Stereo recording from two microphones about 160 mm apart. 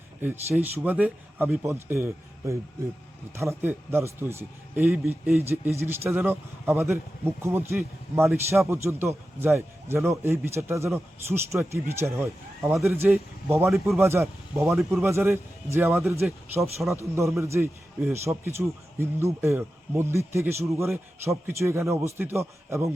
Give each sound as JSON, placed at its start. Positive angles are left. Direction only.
{"t": 0.5, "sound": "a man's voice", "side_deg": -10}
{"t": 13.7, "sound": "speech", "side_deg": 0}
{"t": 14.0, "sound": "a man's voice", "side_deg": -15}